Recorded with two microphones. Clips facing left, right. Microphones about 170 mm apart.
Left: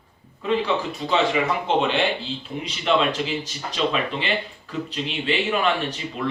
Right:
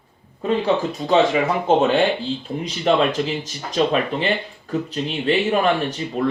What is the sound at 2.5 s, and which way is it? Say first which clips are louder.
Speech: right 2 dB; 30° right (ahead or behind).